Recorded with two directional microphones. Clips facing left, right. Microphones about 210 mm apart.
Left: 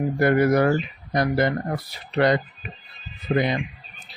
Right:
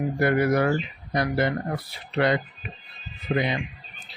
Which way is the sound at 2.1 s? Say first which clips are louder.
Left 3 dB; 40° left (ahead or behind).